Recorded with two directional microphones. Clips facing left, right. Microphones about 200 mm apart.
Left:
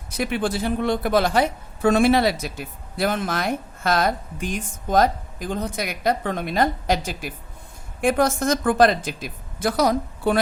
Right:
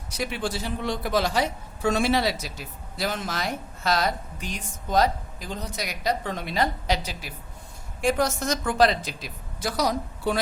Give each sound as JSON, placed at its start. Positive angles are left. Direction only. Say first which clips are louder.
{"t": 0.1, "sound": "a woman's voice", "louder": "left 5 dB", "side_deg": 55}